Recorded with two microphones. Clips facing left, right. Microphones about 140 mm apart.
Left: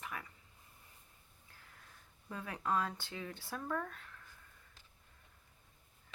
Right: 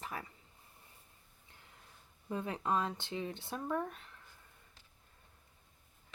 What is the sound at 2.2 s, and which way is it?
Speech, 25° right (ahead or behind).